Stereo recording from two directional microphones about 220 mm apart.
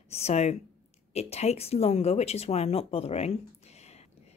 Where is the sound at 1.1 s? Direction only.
30° left (ahead or behind).